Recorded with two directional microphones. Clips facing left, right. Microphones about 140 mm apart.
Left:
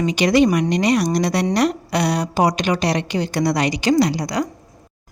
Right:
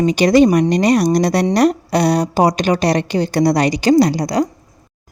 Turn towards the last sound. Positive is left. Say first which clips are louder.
# right 4 dB
turn(degrees=-35)  # may be behind; listen again after turning